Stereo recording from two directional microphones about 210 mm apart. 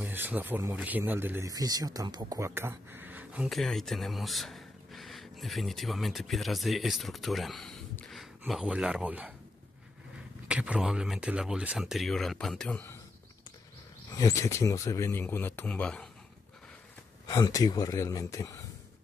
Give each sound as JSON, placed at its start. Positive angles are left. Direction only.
{"t": 0.0, "sound": "speech", "side_deg": -10}
{"t": 10.5, "sound": "speech", "side_deg": -5}
{"t": 14.1, "sound": "speech", "side_deg": 15}
{"t": 17.3, "sound": "speech", "side_deg": 15}